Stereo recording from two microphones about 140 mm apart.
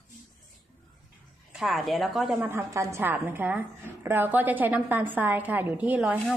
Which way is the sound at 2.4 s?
20° right (ahead or behind).